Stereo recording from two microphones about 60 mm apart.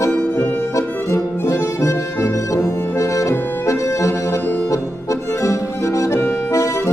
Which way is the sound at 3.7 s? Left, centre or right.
Left.